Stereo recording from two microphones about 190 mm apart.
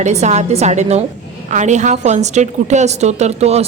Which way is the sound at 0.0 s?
35° right (ahead or behind).